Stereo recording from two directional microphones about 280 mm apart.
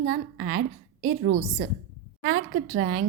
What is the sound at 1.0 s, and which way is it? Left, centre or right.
Speech, right.